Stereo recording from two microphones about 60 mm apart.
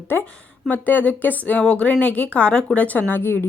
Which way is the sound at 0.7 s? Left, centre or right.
Left.